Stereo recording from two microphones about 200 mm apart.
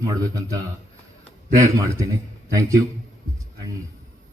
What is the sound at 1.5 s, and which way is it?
Speech, 15° right (ahead or behind).